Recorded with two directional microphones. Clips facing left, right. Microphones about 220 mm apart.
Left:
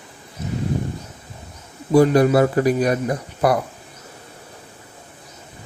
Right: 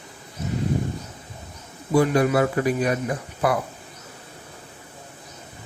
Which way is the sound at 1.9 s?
35° left (ahead or behind).